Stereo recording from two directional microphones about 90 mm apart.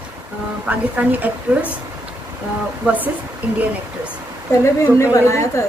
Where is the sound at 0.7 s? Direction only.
15° right (ahead or behind).